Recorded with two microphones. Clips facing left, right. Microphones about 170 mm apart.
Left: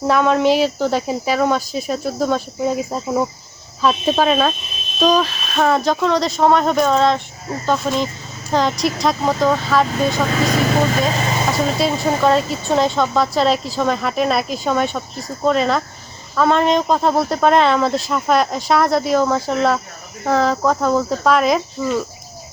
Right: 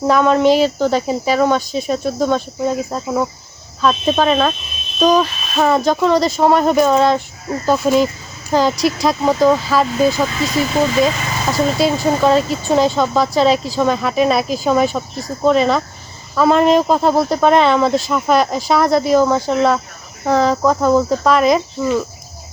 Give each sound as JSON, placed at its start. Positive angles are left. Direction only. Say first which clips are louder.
{"t": 0.1, "sound": "speech", "louder": "right 2 dB", "side_deg": 0}
{"t": 10.9, "sound": "speech", "louder": "right 3 dB", "side_deg": 35}
{"t": 11.5, "sound": "speech", "louder": "right 7 dB", "side_deg": 0}